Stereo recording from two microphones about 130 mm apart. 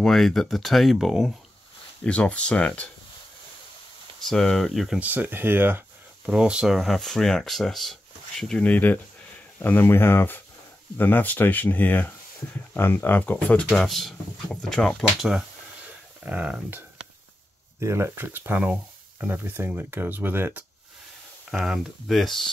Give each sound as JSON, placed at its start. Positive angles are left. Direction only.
{"t": 0.0, "sound": "speech", "side_deg": 5}
{"t": 2.0, "sound": "speech", "side_deg": 10}
{"t": 4.3, "sound": "speech", "side_deg": 5}
{"t": 13.7, "sound": "speech", "side_deg": 0}
{"t": 17.7, "sound": "speech", "side_deg": -20}
{"t": 21.5, "sound": "speech", "side_deg": 0}